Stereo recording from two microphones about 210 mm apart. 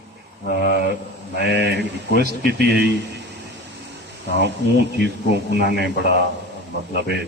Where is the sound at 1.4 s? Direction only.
55° right (ahead or behind).